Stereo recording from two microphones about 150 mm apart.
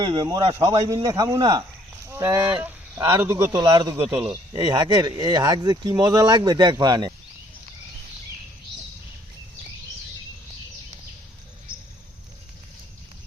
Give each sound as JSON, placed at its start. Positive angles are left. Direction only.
{"t": 0.0, "sound": "speech", "side_deg": -30}
{"t": 0.5, "sound": "speech", "side_deg": -20}
{"t": 2.0, "sound": "speech", "side_deg": -15}